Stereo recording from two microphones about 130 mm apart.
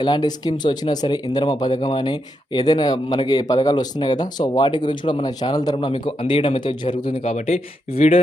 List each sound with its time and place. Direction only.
0.0 s speech: 35° left (ahead or behind)
7.2 s speech: 55° left (ahead or behind)